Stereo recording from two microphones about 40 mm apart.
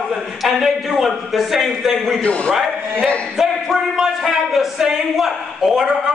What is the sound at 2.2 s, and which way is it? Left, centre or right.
Speech, left.